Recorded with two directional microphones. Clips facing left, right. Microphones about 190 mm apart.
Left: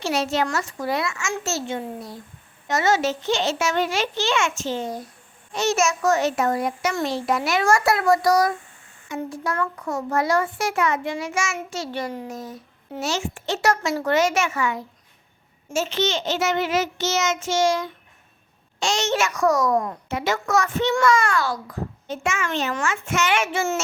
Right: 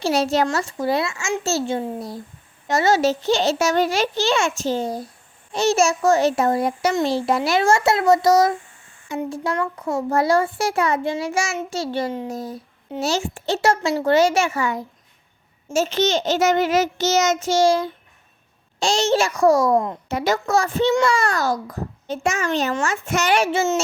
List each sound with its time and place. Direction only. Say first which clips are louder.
0.0 s a child's voice: right 4 dB; 35° right (ahead or behind)